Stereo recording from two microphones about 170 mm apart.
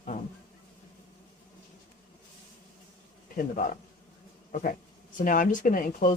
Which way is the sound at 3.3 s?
50° left (ahead or behind).